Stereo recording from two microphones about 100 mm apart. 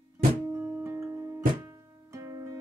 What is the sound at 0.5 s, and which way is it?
Music, 25° right (ahead or behind).